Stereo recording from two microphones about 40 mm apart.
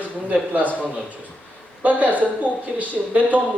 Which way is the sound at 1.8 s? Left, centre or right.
Right.